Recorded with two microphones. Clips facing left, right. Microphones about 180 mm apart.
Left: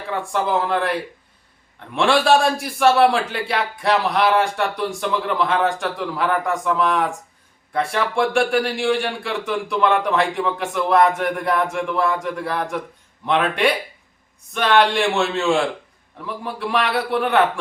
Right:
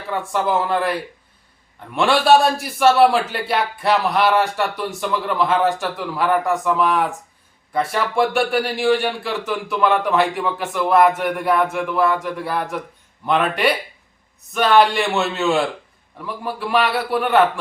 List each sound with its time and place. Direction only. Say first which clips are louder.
0.1 s speech: right 1 dB; centre (ahead or behind)
2.0 s speech: right 2 dB; centre (ahead or behind)